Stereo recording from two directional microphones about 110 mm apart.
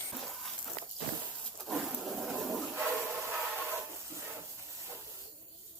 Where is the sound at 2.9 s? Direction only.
15° right (ahead or behind).